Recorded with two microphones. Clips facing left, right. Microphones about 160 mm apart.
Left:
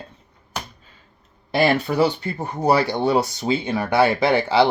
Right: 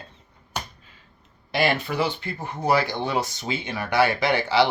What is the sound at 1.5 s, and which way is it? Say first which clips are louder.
Speech: left 5 dB; 40° left (ahead or behind).